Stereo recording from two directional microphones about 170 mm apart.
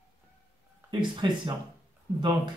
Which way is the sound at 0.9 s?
25° right (ahead or behind).